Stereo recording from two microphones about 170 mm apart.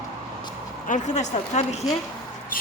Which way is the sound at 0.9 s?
45° left (ahead or behind).